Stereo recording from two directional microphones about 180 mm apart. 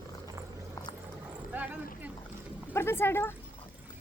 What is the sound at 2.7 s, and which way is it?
Speech, 15° left (ahead or behind).